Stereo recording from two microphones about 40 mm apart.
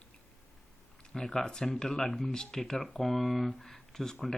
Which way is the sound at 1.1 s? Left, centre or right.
Centre.